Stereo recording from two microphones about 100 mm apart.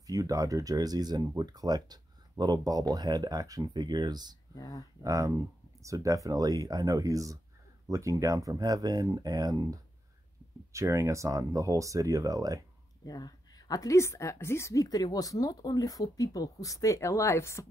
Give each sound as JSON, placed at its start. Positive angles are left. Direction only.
{"t": 0.0, "sound": "speech", "side_deg": -35}
{"t": 4.6, "sound": "a woman's voice", "side_deg": 40}
{"t": 5.0, "sound": "speech", "side_deg": -35}
{"t": 13.0, "sound": "a woman's voice", "side_deg": 40}